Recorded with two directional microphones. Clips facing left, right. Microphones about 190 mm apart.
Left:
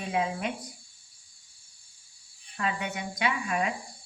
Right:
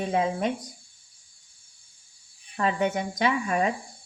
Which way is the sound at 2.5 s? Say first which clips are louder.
Right 7 dB; 40° right (ahead or behind).